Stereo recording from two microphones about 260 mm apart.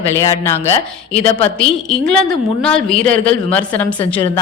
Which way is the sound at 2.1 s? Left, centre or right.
Centre.